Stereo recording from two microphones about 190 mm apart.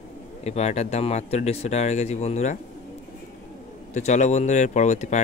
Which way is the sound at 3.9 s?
40° left (ahead or behind).